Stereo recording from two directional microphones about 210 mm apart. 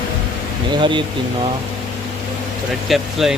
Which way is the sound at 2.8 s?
Centre (ahead or behind).